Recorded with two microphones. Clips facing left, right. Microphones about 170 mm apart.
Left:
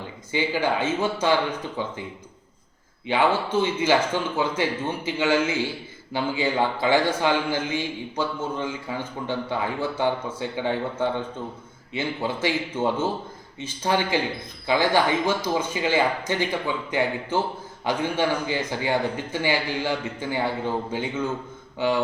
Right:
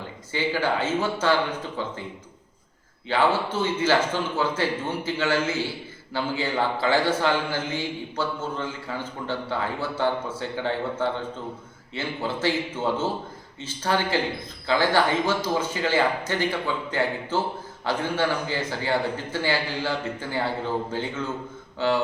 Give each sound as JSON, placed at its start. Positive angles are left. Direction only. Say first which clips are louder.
{"t": 0.3, "sound": "a man's voice", "louder": "left 1 dB", "side_deg": 15}
{"t": 3.1, "sound": "a man's voice", "louder": "left 1 dB", "side_deg": 15}